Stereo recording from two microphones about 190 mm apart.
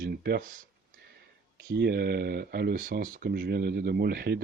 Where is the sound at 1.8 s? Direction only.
55° right (ahead or behind).